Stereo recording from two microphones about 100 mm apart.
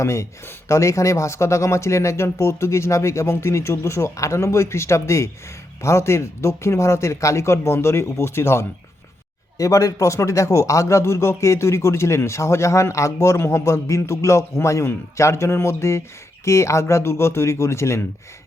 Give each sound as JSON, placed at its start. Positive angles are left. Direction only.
{"t": 0.0, "sound": "speech", "side_deg": 30}